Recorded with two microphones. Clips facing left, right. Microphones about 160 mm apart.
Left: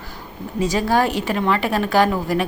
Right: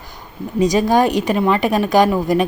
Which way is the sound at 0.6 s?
15° right (ahead or behind).